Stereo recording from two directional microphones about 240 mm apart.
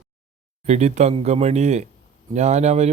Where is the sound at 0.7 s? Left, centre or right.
Right.